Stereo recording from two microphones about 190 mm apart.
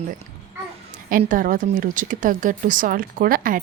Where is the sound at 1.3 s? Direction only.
45° right (ahead or behind).